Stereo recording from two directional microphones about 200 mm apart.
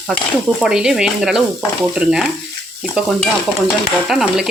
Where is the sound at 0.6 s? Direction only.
5° right (ahead or behind).